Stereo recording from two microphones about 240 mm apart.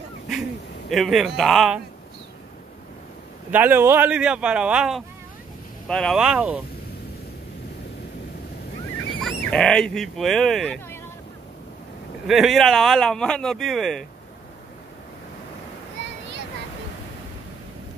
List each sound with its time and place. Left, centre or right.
0.3 s speech: centre
3.5 s speech: centre
9.4 s speech: centre
12.3 s speech: centre